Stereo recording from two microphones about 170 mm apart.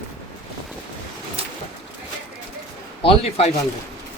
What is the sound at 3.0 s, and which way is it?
Speech, 35° left (ahead or behind).